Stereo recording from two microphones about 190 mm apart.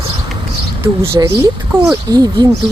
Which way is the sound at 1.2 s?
20° right (ahead or behind).